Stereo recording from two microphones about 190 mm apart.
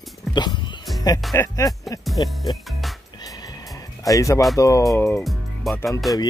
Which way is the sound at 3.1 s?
20° left (ahead or behind).